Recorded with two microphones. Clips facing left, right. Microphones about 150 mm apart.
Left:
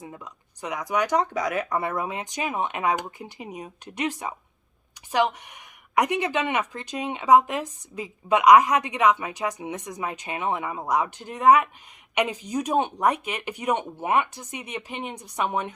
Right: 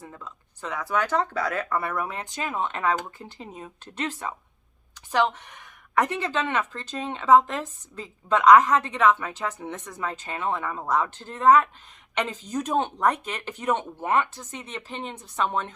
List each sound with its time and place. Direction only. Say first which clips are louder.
0.0 s speech: left 1 dB; 15° left (ahead or behind)